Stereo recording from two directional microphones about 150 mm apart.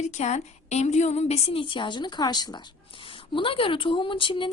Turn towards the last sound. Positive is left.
turn(degrees=35)  # may be behind; listen again after turning